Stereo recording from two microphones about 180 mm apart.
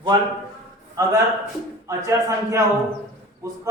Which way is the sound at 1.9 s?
15° right (ahead or behind).